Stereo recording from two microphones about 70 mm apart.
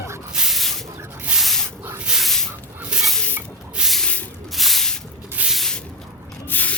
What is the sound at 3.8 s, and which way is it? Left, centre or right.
Snake, centre.